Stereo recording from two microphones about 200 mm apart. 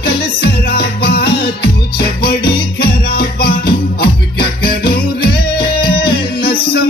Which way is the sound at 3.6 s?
50° left (ahead or behind).